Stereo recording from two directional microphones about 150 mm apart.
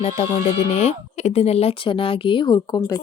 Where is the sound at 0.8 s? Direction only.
45° left (ahead or behind).